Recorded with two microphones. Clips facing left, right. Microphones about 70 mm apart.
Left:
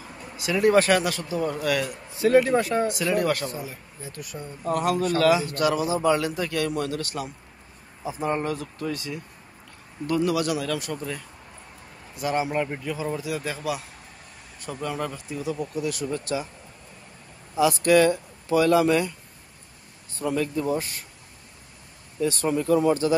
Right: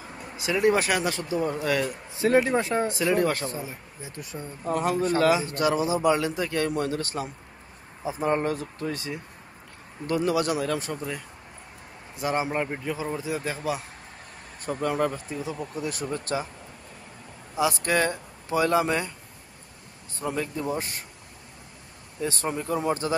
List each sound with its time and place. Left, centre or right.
0.4 s speech: centre
1.0 s a man's voice: right
11.0 s a man's voice: centre
14.6 s speech: right
17.6 s a man's voice: right
20.2 s a man's voice: right
22.2 s a man's voice: right